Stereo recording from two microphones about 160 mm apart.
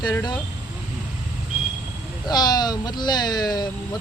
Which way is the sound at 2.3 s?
25° left (ahead or behind).